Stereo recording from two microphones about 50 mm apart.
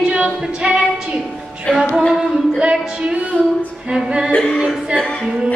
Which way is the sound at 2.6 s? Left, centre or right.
Right.